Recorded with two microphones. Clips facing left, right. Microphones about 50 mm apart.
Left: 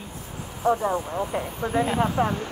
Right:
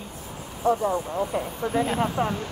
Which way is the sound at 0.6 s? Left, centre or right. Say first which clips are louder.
Even; left.